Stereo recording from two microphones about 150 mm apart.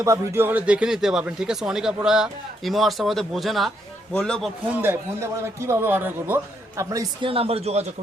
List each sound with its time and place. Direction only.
0.0 s speech: 20° right (ahead or behind); by 4.5 s 5° left (ahead or behind)
4.7 s speech: 15° right (ahead or behind)
7.2 s speech: 40° right (ahead or behind)